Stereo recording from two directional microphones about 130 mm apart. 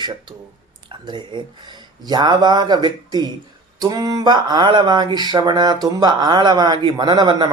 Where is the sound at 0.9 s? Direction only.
40° right (ahead or behind).